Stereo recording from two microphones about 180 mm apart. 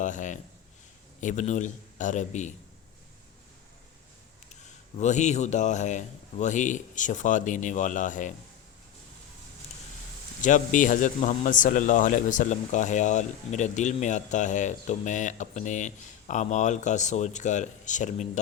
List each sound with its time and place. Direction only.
0.0 s a sound: 45° left (ahead or behind)
1.2 s a man's voice: 45° left (ahead or behind)
4.9 s a man's voice: 40° left (ahead or behind)
10.4 s a man's voice: 45° left (ahead or behind)